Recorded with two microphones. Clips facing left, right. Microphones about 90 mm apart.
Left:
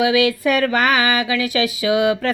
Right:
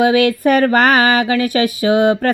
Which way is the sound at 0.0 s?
50° right (ahead or behind).